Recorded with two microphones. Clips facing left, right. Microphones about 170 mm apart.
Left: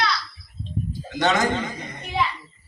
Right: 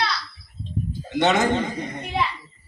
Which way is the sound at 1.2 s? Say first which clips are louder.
Right 2 dB; 25° right (ahead or behind).